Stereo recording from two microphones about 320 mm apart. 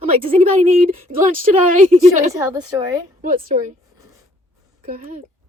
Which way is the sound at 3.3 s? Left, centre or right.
Right.